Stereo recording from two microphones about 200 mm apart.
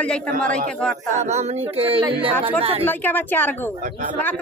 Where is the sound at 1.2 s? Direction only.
35° right (ahead or behind).